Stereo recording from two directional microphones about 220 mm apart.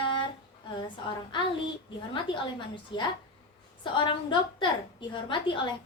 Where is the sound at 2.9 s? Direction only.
20° left (ahead or behind).